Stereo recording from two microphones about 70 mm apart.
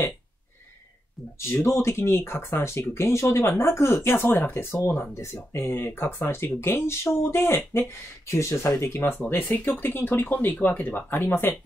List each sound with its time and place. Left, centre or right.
1.6 s speech: left